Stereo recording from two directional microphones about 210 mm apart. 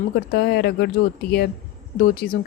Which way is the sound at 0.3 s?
50° left (ahead or behind).